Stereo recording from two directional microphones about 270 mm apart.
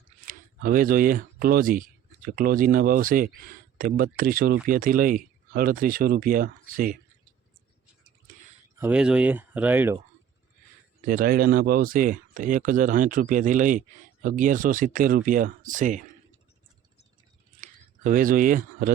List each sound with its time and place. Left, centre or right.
0.3 s speech: right
8.8 s speech: centre
11.0 s speech: right
17.6 s a sound: right